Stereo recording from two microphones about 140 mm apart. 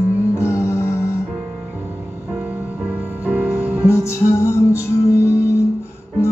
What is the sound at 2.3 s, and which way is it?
Music, 10° right (ahead or behind).